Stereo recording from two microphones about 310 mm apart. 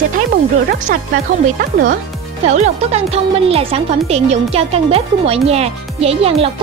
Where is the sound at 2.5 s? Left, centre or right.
Right.